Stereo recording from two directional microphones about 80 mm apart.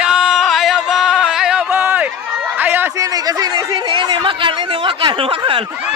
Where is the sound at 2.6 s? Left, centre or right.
Right.